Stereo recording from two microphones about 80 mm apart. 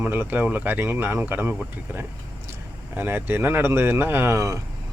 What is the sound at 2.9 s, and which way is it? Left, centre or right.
Speech, right.